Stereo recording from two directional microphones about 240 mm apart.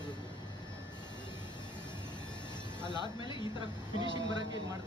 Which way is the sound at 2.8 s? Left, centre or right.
Centre.